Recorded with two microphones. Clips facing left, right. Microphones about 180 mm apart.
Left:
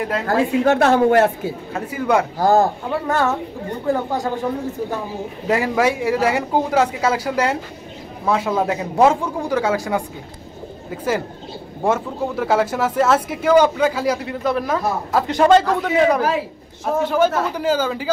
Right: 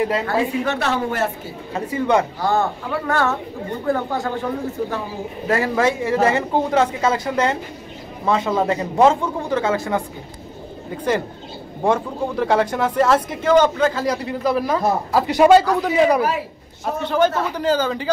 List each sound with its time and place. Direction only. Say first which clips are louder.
0.0 s speech: even; centre (ahead or behind)
0.7 s speech: left 8 dB; 50° left (ahead or behind)
1.7 s speech: right 1 dB; 5° left (ahead or behind)
2.3 s a man's voice: left 5 dB; 40° left (ahead or behind)
2.9 s speech: left 1 dB; 15° left (ahead or behind)
5.5 s speech: left 1 dB; 10° left (ahead or behind)
11.8 s speech: even; 5° left (ahead or behind)
16.8 s speech: left 1 dB; 5° left (ahead or behind)